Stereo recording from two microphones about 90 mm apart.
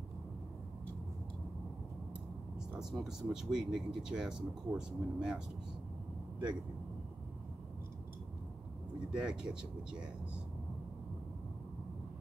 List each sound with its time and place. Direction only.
2.8 s speech: 5° right (ahead or behind)
9.1 s speech: 10° right (ahead or behind)